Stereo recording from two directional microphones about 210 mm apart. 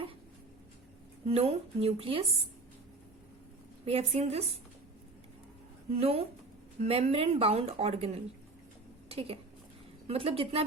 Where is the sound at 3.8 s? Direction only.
30° right (ahead or behind).